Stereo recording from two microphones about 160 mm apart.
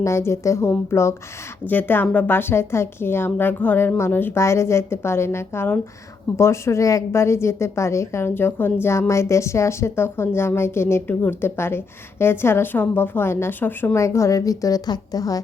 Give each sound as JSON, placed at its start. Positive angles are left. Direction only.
{"t": 0.0, "sound": "a woman's voice", "side_deg": 15}